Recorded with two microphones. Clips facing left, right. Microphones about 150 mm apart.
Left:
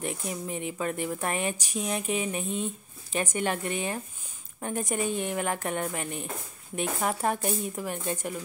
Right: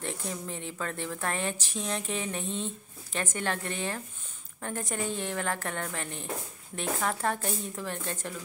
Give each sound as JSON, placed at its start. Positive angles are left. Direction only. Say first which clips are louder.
{"t": 0.0, "sound": "a woman's voice", "louder": "left 3 dB", "side_deg": 15}